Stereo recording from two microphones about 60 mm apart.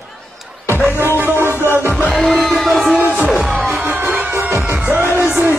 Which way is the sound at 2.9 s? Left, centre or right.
Right.